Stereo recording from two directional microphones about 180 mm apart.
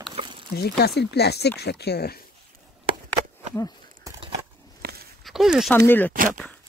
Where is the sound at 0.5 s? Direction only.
60° left (ahead or behind).